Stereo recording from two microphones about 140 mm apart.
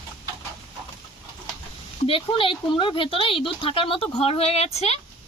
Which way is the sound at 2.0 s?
40° left (ahead or behind).